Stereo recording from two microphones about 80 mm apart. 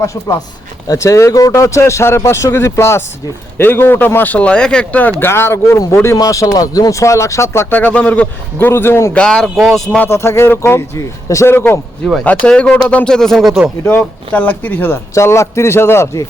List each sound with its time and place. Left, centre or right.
0.0 s a man's voice: left; by 5.1 s centre
5.2 s a man's voice: left
6.1 s a man's voice: left
7.7 s speech: centre
9.1 s speech: centre
9.4 s speech: centre
10.1 s a man's voice: left
12.2 s speech: centre
13.1 s speech: centre
13.8 s speech: left
15.1 s a man's voice: left